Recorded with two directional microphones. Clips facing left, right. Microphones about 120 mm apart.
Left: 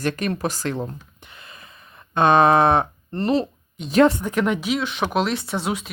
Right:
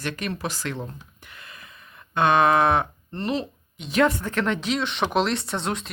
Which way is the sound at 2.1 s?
35° left (ahead or behind).